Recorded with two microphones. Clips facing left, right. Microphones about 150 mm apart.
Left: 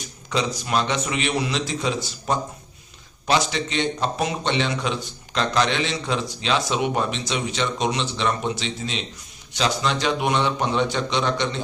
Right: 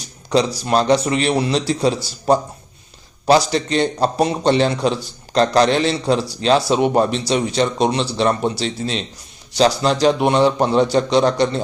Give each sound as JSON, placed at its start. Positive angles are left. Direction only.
{"t": 0.0, "sound": "a man's voice", "side_deg": -35}